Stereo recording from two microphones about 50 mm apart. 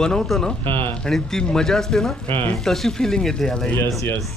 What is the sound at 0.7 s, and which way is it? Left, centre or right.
Speech, left.